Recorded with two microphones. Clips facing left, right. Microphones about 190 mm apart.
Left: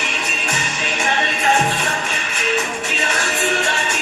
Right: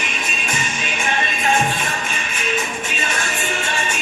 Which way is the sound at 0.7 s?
75° left (ahead or behind).